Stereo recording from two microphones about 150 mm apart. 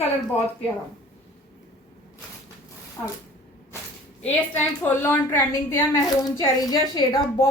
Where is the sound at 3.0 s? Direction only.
15° left (ahead or behind).